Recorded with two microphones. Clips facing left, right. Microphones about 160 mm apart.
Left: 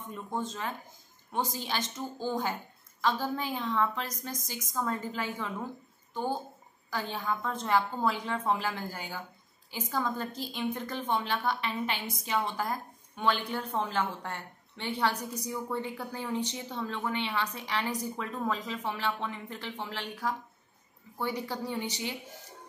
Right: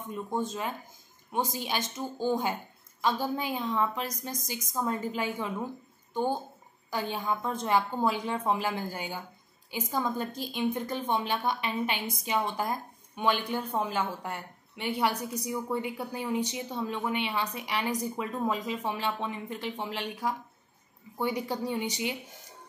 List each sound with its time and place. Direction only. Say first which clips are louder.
0.1 s a woman's voice: right 4 dB; 15° right (ahead or behind)
6.9 s a woman's voice: right 2 dB; 15° right (ahead or behind)